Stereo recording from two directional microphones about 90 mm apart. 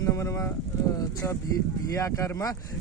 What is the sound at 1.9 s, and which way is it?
Speech, 35° left (ahead or behind).